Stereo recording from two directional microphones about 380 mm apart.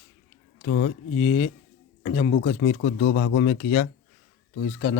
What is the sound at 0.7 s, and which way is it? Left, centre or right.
Speech, left.